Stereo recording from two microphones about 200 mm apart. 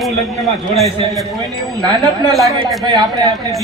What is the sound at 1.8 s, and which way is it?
Speech, 20° right (ahead or behind).